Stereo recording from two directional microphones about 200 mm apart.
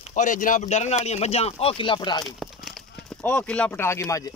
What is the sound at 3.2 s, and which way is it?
Speech, 5° left (ahead or behind).